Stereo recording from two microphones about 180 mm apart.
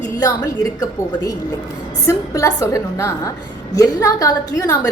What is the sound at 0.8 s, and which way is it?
A woman's voice, 20° left (ahead or behind).